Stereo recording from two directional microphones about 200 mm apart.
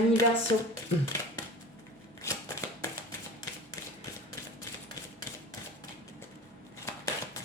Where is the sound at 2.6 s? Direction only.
15° left (ahead or behind).